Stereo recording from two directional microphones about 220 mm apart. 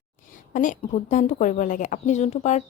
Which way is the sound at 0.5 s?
35° left (ahead or behind).